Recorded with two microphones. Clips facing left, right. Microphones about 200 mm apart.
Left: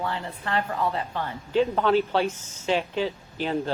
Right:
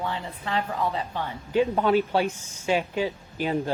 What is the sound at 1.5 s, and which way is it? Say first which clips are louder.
A woman's voice: even; 15° right (ahead or behind).